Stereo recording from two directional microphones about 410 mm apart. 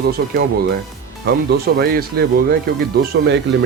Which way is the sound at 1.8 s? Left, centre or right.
Right.